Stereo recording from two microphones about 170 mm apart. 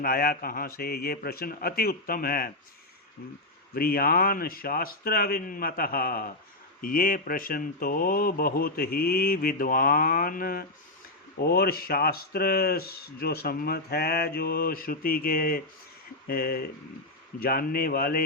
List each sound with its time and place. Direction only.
0.0 s speech: 60° left (ahead or behind)
3.8 s speech: 60° left (ahead or behind)